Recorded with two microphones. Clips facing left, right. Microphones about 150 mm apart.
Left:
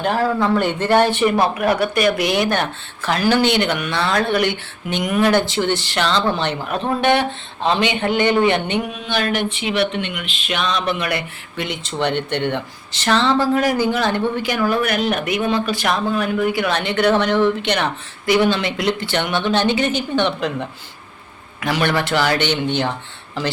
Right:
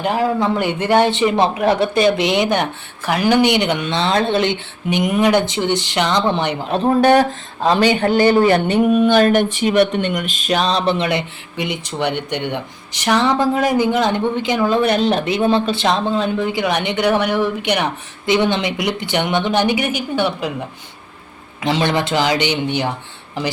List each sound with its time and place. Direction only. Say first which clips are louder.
0.0 s speech: right 1 dB; 15° right (ahead or behind)
6.7 s speech: right 5 dB; 35° right (ahead or behind); by 20.7 s 10° right (ahead or behind)
21.6 s speech: right 2 dB; 20° right (ahead or behind)